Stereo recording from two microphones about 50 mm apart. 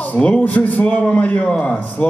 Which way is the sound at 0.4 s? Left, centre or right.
Left.